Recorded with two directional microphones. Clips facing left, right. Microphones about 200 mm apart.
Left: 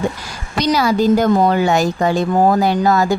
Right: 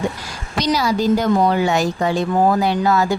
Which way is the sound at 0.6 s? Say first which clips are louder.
Left 3 dB; 55° left (ahead or behind).